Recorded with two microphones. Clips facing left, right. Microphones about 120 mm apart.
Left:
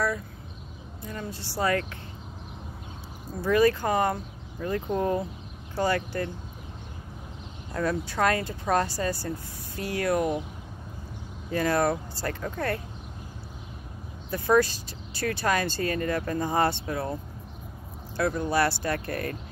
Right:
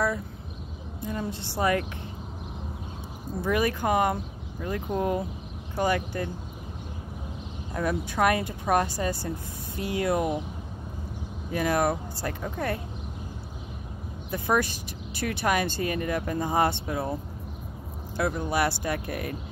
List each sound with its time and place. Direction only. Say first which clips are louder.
1.0 s speech: right 4 dB; 20° right (ahead or behind)
3.4 s speech: left 3 dB; 15° right (ahead or behind)
7.7 s speech: even; 15° right (ahead or behind)
11.5 s speech: left 1 dB; 15° right (ahead or behind)
14.3 s speech: left 3 dB; 15° right (ahead or behind)